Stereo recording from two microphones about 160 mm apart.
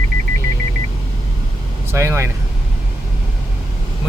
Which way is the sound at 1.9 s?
15° right (ahead or behind).